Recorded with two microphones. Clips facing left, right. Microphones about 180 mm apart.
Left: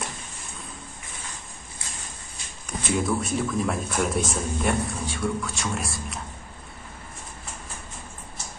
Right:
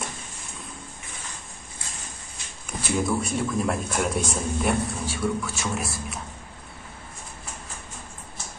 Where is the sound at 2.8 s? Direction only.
Centre (ahead or behind).